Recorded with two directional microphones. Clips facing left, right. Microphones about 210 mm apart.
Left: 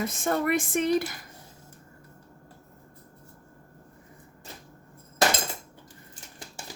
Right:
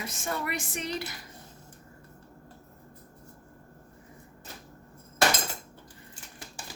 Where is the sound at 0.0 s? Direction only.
50° left (ahead or behind).